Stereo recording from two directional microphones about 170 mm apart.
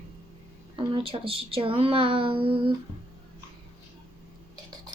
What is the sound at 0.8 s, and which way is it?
Speech, 30° right (ahead or behind).